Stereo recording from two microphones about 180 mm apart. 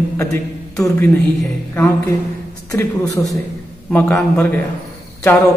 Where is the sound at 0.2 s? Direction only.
20° left (ahead or behind).